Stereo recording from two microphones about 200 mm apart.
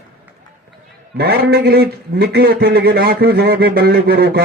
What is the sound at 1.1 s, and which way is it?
A man's voice, 55° right (ahead or behind).